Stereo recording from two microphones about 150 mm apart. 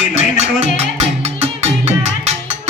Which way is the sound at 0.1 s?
50° right (ahead or behind).